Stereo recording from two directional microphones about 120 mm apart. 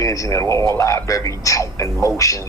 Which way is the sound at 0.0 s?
25° left (ahead or behind).